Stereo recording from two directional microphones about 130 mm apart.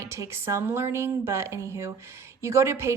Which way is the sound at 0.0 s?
20° right (ahead or behind).